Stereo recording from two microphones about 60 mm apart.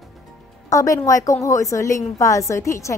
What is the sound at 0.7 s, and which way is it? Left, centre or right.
A woman's voice, left.